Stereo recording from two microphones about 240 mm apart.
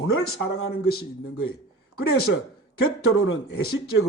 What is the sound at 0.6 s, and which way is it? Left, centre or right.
Speech, left.